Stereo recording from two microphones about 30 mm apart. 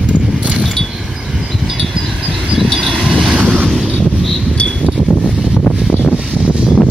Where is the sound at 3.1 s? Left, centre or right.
Centre.